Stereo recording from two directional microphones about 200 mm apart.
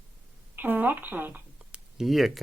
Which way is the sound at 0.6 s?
10° right (ahead or behind).